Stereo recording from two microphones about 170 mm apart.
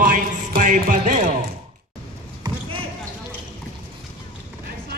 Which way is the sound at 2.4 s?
25° right (ahead or behind).